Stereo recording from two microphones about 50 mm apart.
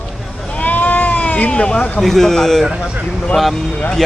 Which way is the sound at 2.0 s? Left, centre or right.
Centre.